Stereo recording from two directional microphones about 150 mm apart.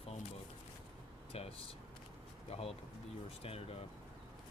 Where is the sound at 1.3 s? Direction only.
40° left (ahead or behind).